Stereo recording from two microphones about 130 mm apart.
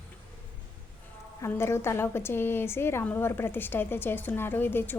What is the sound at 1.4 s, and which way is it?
A woman's voice, 20° left (ahead or behind).